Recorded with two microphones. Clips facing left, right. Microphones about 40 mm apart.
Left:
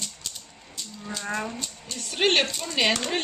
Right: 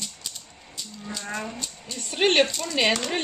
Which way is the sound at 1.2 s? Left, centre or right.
Centre.